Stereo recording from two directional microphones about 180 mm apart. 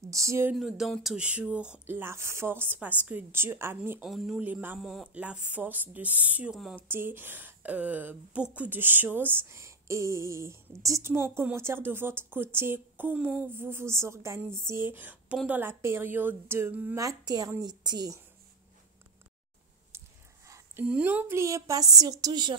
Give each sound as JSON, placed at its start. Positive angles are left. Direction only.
{"t": 0.1, "sound": "speech", "side_deg": -15}
{"t": 0.6, "sound": "a woman's voice", "side_deg": 0}
{"t": 19.9, "sound": "a sound", "side_deg": -15}
{"t": 20.8, "sound": "speech", "side_deg": -5}